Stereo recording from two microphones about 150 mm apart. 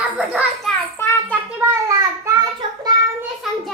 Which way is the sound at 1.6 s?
20° right (ahead or behind).